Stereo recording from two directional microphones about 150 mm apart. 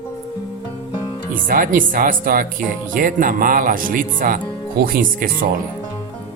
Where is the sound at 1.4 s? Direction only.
65° right (ahead or behind).